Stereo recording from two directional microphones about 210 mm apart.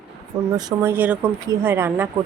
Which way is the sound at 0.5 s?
10° right (ahead or behind).